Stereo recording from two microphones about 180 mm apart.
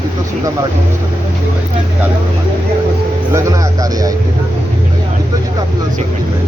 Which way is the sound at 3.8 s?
20° right (ahead or behind).